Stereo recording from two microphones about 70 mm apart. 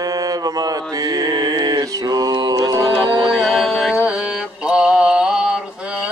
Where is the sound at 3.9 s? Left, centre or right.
Centre.